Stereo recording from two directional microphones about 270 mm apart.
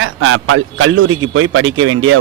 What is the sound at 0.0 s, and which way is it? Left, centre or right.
A man's voice, right.